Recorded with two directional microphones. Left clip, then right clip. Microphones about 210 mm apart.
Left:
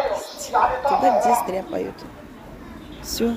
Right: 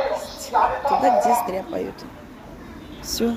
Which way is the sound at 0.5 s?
60° left (ahead or behind).